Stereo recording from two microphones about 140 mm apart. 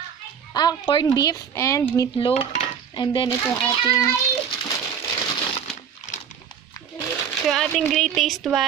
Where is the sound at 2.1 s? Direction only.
40° left (ahead or behind).